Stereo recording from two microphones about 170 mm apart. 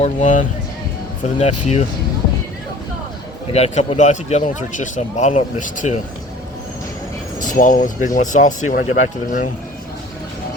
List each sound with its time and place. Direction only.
0.0 s speech: 45° left (ahead or behind)
3.5 s speech: 40° left (ahead or behind)
7.3 s speech: 50° left (ahead or behind)